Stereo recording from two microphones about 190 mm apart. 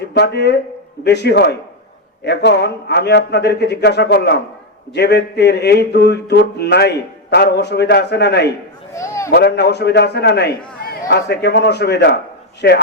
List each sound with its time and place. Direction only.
0.1 s speech: 60° left (ahead or behind)
1.0 s music: 60° left (ahead or behind)
9.0 s a sound: 15° left (ahead or behind)
9.3 s music: 60° left (ahead or behind)